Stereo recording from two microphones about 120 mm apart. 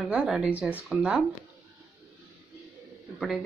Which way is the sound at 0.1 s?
10° right (ahead or behind).